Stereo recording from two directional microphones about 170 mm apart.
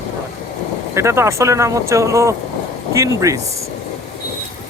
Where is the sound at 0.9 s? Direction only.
15° right (ahead or behind).